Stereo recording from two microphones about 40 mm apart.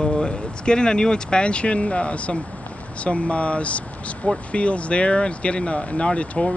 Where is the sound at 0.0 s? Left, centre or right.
Left.